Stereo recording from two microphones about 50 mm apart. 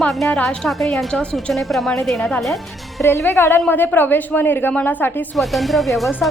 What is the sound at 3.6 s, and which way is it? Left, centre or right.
A woman's voice, left.